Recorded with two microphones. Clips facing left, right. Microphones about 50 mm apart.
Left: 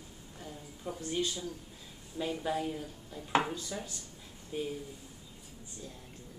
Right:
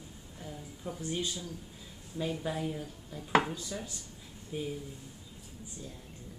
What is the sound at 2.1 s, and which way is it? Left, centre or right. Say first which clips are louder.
Speech: left 1 dB; centre.